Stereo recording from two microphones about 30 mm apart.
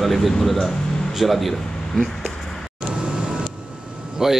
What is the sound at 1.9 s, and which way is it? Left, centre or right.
Speech, left.